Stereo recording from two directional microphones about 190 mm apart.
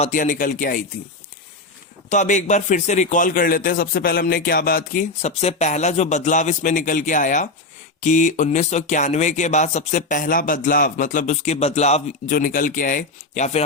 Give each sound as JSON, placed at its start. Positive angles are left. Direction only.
{"t": 0.0, "sound": "a man's voice", "side_deg": 45}
{"t": 2.0, "sound": "a man's voice", "side_deg": 40}